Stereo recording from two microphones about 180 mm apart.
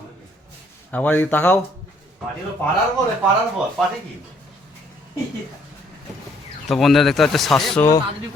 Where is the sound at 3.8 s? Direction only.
Centre (ahead or behind).